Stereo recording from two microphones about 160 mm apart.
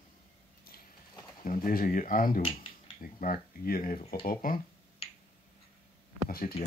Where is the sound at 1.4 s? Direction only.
60° left (ahead or behind).